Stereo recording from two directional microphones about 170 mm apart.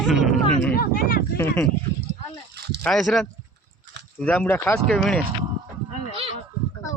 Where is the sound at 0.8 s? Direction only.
60° left (ahead or behind).